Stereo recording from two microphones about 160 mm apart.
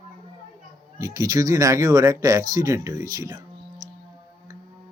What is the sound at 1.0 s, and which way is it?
Speech, 20° right (ahead or behind).